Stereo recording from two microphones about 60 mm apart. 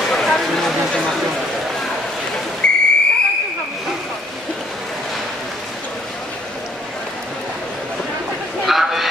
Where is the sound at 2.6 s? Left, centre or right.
Centre.